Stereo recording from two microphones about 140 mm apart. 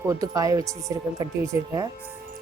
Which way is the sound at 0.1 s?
25° right (ahead or behind).